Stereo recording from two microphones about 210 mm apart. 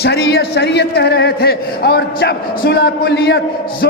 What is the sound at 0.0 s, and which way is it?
A man's voice, 50° left (ahead or behind).